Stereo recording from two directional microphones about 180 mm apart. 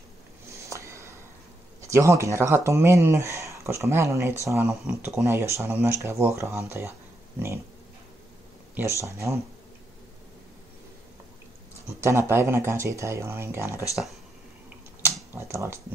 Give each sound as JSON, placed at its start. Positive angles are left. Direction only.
{"t": 0.5, "sound": "a sound", "side_deg": -15}
{"t": 1.8, "sound": "speech", "side_deg": -15}
{"t": 9.0, "sound": "speech", "side_deg": -15}
{"t": 11.9, "sound": "speech", "side_deg": -15}
{"t": 15.3, "sound": "speech", "side_deg": -15}